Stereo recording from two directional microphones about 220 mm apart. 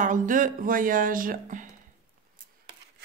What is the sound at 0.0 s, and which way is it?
Speech, 35° right (ahead or behind).